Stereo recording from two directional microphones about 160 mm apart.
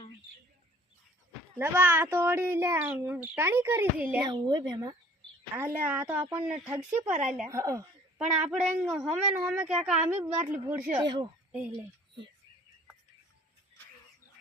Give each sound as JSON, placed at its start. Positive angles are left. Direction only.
{"t": 1.5, "sound": "speech", "side_deg": -15}
{"t": 4.3, "sound": "speech", "side_deg": -25}
{"t": 5.5, "sound": "speech", "side_deg": -10}
{"t": 7.4, "sound": "speech", "side_deg": -20}
{"t": 8.4, "sound": "speech", "side_deg": 0}
{"t": 11.0, "sound": "speech", "side_deg": -30}